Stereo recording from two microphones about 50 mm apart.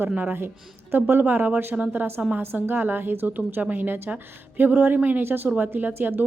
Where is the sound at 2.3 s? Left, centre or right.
Right.